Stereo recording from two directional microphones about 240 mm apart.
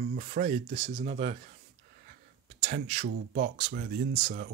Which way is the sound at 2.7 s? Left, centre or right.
Right.